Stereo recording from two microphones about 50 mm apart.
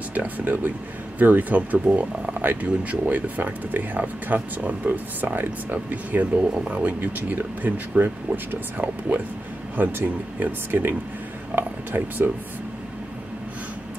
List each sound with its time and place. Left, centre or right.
0.1 s speech: right